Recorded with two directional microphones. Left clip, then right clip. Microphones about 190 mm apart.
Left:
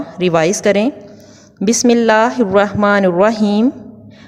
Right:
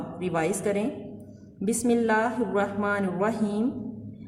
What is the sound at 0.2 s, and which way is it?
Speech, 50° left (ahead or behind).